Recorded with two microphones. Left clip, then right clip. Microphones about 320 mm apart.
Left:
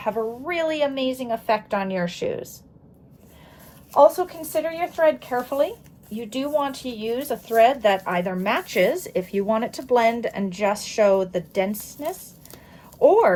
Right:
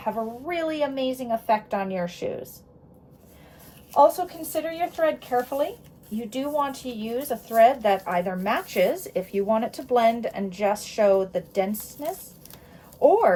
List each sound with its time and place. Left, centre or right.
0.0 s speech: left
5.0 s speech: centre
13.0 s speech: left